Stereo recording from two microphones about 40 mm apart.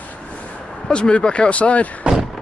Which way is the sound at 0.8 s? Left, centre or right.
Left.